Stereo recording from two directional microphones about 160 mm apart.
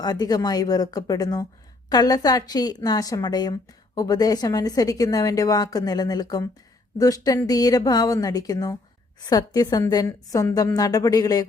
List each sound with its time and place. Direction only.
0.0 s a woman's voice: 25° left (ahead or behind)